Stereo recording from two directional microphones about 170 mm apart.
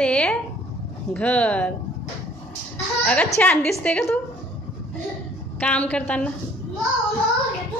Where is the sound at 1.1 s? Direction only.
10° left (ahead or behind).